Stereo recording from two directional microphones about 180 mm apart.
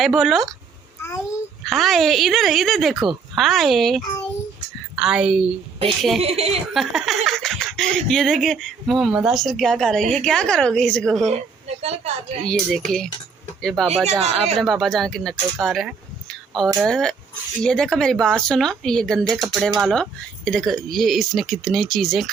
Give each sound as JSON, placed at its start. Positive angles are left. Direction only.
{"t": 0.0, "sound": "speech", "side_deg": 0}
{"t": 1.6, "sound": "speech", "side_deg": 0}
{"t": 6.2, "sound": "a woman's voice", "side_deg": -35}
{"t": 6.7, "sound": "speech", "side_deg": 0}
{"t": 11.8, "sound": "a woman's voice", "side_deg": -35}
{"t": 12.4, "sound": "speech", "side_deg": 5}